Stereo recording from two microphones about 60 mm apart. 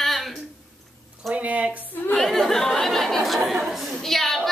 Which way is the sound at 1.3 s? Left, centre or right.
Right.